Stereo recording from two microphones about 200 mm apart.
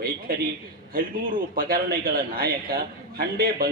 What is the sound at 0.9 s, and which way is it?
A man's voice, 45° right (ahead or behind).